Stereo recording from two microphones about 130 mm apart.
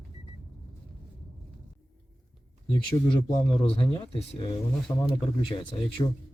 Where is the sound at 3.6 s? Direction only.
45° left (ahead or behind).